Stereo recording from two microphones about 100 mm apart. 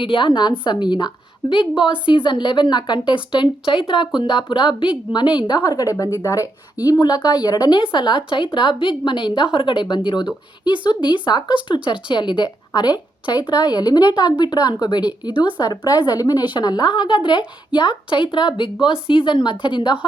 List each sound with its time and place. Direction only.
0.0 s a woman's voice: 55° left (ahead or behind)